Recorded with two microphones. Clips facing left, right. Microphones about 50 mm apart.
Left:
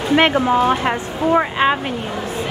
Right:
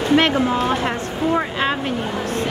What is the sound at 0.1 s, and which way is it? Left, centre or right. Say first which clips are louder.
Speech: left 3 dB; centre.